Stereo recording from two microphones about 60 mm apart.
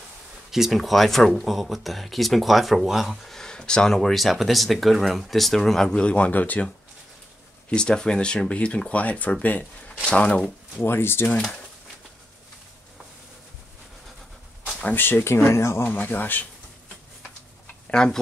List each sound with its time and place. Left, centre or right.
0.5 s speech: centre; by 6.6 s left
7.7 s speech: centre
10.8 s speech: left
14.7 s a sound: left
15.0 s speech: left
16.0 s speech: left
17.9 s speech: centre